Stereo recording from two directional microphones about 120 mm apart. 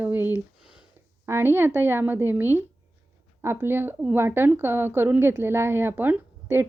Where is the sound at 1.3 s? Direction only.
20° right (ahead or behind).